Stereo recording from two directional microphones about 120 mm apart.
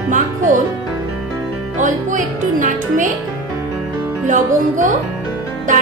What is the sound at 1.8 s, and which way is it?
A woman's voice, 90° right.